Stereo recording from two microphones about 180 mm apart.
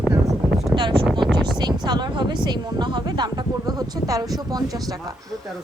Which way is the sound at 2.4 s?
25° right (ahead or behind).